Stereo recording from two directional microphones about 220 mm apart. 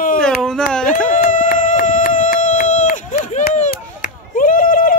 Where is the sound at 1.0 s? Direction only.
35° left (ahead or behind).